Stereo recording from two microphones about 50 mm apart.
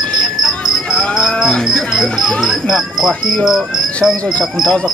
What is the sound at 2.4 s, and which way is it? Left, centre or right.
Speech, centre.